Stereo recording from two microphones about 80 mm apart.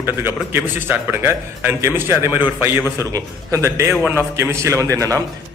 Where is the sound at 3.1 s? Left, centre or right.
Right.